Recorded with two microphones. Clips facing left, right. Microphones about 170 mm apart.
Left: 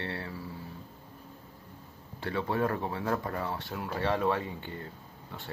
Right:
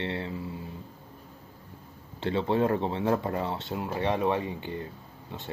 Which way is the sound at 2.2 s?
25° right (ahead or behind).